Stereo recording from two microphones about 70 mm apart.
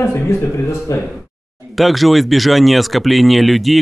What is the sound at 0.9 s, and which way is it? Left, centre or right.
Speech, left.